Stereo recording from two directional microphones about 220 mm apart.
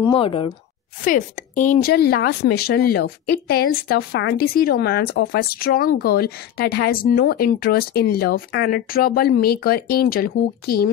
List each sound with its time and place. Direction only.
0.1 s a woman's voice: 25° left (ahead or behind)
1.0 s speech: 35° left (ahead or behind)